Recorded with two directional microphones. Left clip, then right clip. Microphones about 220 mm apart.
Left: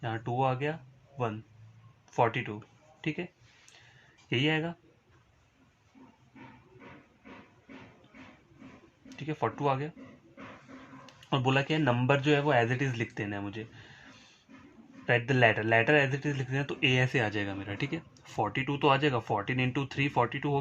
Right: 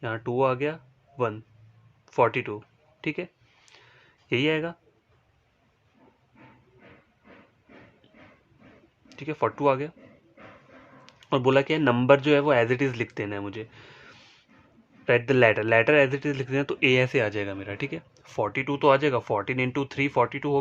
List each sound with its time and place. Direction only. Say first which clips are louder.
0.0 s speech: right 5 dB; 45° right (ahead or behind)
2.1 s speech: right 5 dB; 45° right (ahead or behind)
4.3 s speech: right 5 dB; 40° right (ahead or behind)
9.1 s speech: right 6 dB; 45° right (ahead or behind)
11.3 s speech: right 7 dB; 45° right (ahead or behind)